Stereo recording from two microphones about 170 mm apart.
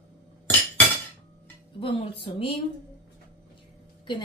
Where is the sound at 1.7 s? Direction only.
35° left (ahead or behind).